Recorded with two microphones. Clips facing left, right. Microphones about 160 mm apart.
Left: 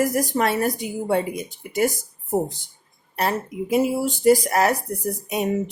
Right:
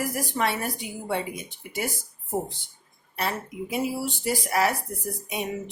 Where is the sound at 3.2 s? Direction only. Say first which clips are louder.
Left 6 dB; 45° left (ahead or behind).